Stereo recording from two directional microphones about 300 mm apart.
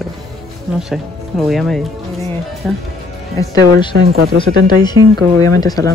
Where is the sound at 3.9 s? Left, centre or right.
Right.